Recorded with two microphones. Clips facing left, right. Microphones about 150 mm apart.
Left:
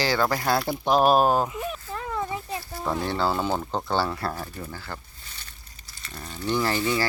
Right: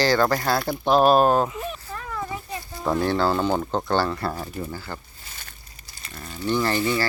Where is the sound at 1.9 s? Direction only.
25° left (ahead or behind).